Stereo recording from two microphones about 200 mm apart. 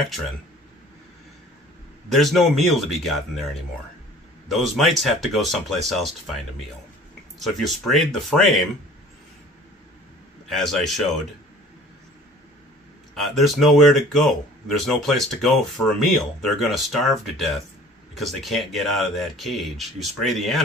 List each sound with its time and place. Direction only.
2.0 s speech: centre (ahead or behind)
4.5 s speech: centre (ahead or behind)
7.3 s speech: centre (ahead or behind)
10.5 s speech: centre (ahead or behind)
13.1 s speech: centre (ahead or behind)